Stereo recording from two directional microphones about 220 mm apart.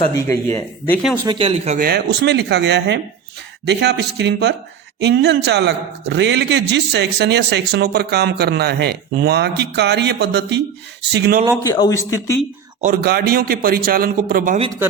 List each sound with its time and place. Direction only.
0.1 s speech: 15° left (ahead or behind)
1.2 s speech: 20° right (ahead or behind)
1.8 s a man's voice: 45° right (ahead or behind)
11.7 s speech: 15° left (ahead or behind)
12.8 s a man's voice: 40° right (ahead or behind)